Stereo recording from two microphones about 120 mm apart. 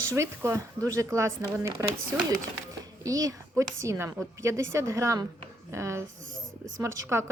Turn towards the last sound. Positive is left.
turn(degrees=-25)  # may be behind; listen again after turning